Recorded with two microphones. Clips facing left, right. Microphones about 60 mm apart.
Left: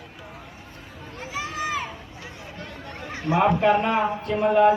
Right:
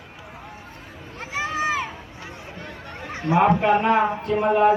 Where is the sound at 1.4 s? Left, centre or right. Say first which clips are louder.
Right 5 dB; right.